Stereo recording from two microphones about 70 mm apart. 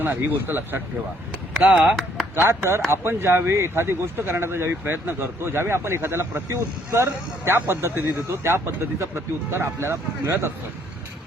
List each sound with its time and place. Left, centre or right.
0.0 s speech: right
1.6 s speech: centre
2.3 s speech: right